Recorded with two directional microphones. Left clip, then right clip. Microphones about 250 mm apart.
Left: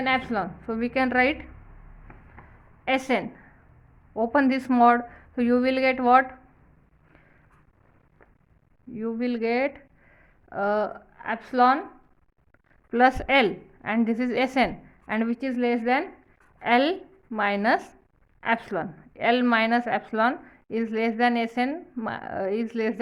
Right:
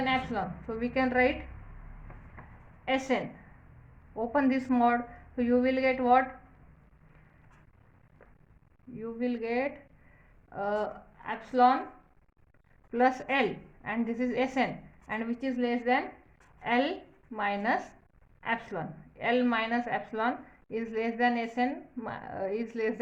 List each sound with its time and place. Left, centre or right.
0.0 s a woman's voice: left
2.8 s a woman's voice: left
9.0 s a woman's voice: left
12.9 s a woman's voice: left